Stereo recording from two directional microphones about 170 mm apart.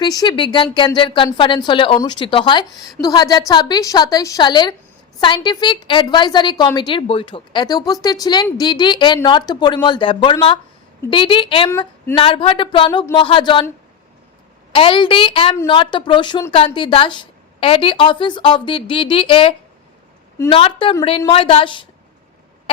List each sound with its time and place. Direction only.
0.0 s a woman's voice: 25° left (ahead or behind)
14.7 s a woman's voice: 30° left (ahead or behind)